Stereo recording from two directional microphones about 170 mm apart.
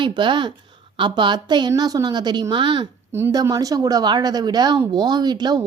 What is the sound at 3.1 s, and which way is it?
Speech, 15° right (ahead or behind).